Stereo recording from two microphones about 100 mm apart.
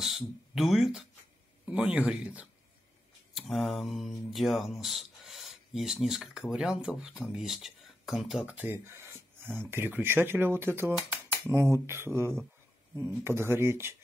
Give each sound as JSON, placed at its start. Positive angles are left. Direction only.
{"t": 0.0, "sound": "speech", "side_deg": 0}
{"t": 1.7, "sound": "speech", "side_deg": -10}
{"t": 3.3, "sound": "speech", "side_deg": 0}
{"t": 8.6, "sound": "a sound", "side_deg": -25}
{"t": 9.7, "sound": "speech", "side_deg": -20}